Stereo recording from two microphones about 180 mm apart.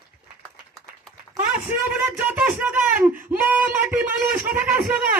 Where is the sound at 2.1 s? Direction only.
10° right (ahead or behind).